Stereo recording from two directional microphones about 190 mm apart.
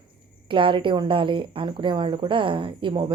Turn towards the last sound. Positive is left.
turn(degrees=-25)  # may be behind; listen again after turning